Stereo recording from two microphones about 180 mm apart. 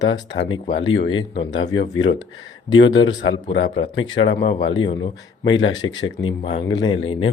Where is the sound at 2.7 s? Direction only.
90° left.